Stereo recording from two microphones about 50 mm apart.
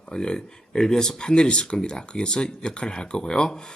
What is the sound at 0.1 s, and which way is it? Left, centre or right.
Speech, centre.